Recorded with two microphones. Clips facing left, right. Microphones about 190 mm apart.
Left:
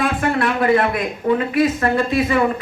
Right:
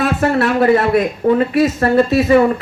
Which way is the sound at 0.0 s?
40° right (ahead or behind).